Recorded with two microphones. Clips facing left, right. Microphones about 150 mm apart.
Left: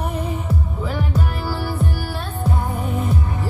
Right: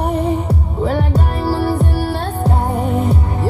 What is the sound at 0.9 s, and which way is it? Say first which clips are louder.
Music: right 5 dB; 65° right (ahead or behind).